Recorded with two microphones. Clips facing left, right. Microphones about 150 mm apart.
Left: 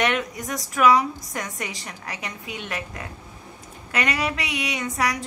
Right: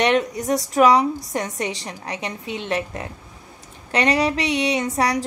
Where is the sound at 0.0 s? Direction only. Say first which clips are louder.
Right 5 dB; 30° right (ahead or behind).